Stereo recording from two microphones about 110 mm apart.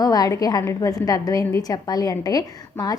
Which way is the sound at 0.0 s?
35° left (ahead or behind).